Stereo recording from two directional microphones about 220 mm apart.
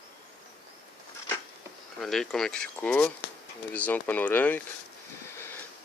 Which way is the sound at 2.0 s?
Centre (ahead or behind).